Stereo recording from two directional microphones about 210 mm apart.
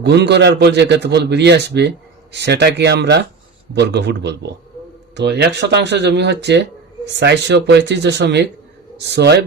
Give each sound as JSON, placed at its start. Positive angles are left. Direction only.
{"t": 0.0, "sound": "a man's voice", "side_deg": -55}